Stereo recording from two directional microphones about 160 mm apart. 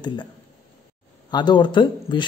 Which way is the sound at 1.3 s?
30° left (ahead or behind).